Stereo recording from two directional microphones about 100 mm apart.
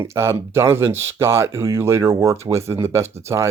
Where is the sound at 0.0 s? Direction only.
25° right (ahead or behind).